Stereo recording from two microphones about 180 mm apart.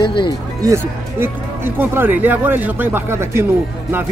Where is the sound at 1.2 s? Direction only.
10° right (ahead or behind).